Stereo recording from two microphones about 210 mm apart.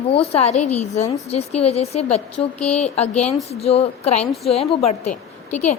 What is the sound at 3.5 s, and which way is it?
A woman's voice, 30° left (ahead or behind).